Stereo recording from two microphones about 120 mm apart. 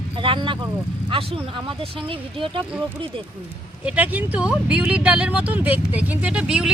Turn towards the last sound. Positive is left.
turn(degrees=-5)  # may be behind; listen again after turning